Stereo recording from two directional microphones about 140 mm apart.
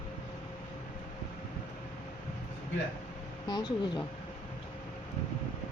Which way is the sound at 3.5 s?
30° left (ahead or behind).